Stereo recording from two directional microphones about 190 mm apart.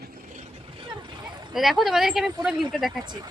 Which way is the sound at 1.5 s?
Centre (ahead or behind).